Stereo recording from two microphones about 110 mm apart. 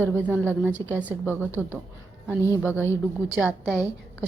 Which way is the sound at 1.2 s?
20° left (ahead or behind).